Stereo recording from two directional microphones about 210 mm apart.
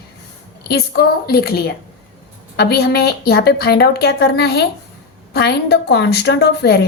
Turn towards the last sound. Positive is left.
turn(degrees=50)  # may be behind; listen again after turning